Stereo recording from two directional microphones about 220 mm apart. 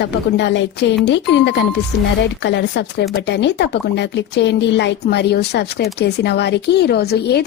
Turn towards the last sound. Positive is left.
turn(degrees=45)  # may be behind; listen again after turning